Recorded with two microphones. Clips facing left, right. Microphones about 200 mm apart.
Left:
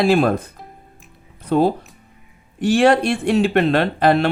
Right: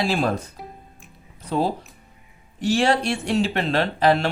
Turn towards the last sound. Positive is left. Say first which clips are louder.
# left 3 dB
turn(degrees=60)  # may be behind; listen again after turning